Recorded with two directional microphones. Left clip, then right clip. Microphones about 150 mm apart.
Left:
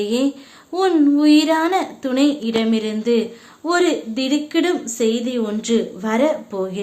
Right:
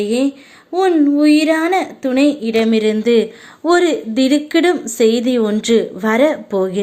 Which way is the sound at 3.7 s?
35° right (ahead or behind).